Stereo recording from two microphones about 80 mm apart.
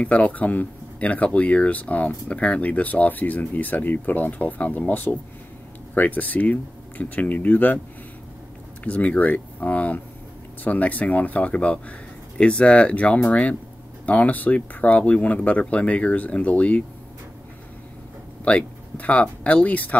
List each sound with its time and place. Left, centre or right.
0.0 s speech: centre
8.8 s speech: centre
18.4 s speech: centre